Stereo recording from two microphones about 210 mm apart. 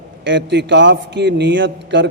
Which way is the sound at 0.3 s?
60° right (ahead or behind).